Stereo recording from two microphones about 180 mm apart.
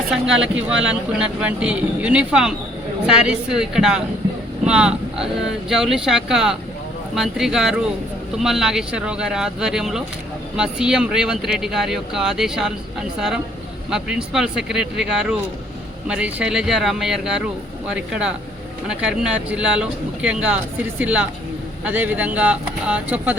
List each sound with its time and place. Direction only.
0.3 s speech: 90° right
0.9 s speech: 5° right (ahead or behind)